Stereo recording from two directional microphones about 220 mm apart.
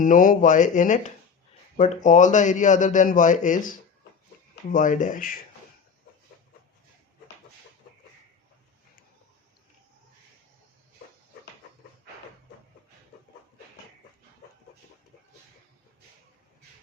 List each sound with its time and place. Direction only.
0.0 s a man's voice: 35° left (ahead or behind)